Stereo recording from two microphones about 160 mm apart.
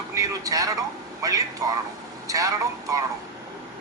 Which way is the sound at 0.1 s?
20° right (ahead or behind).